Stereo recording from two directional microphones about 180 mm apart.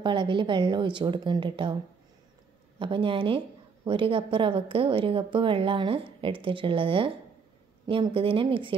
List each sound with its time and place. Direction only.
0.0 s a woman's voice: 25° right (ahead or behind)
2.8 s a woman's voice: 30° right (ahead or behind)